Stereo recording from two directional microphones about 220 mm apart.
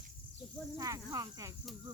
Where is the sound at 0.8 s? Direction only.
15° right (ahead or behind).